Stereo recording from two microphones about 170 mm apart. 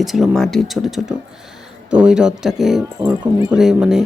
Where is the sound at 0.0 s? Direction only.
Centre (ahead or behind).